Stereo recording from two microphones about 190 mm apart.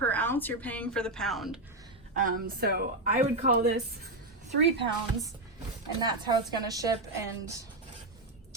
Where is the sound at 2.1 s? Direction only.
45° right (ahead or behind).